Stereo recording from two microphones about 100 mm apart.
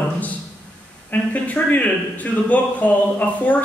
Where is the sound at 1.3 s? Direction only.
15° left (ahead or behind).